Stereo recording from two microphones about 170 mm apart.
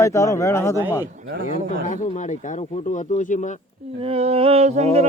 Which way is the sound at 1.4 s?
45° left (ahead or behind).